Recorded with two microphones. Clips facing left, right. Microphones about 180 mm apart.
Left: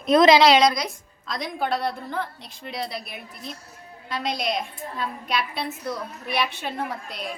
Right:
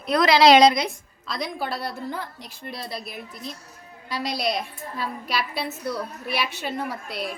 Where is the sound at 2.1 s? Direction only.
10° right (ahead or behind).